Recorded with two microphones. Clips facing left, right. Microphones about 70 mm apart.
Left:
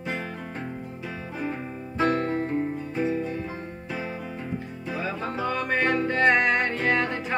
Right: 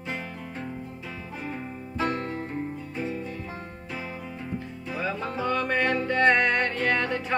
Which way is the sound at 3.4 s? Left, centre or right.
Centre.